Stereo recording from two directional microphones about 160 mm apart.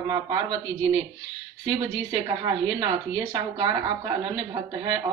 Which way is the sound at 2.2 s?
25° right (ahead or behind).